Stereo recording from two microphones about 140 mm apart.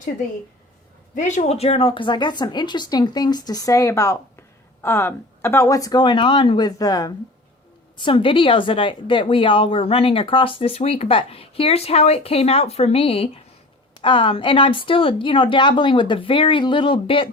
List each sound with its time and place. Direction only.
1.1 s a woman's voice: 65° left (ahead or behind); by 7.1 s 25° left (ahead or behind)
7.9 s a woman's voice: 35° left (ahead or behind)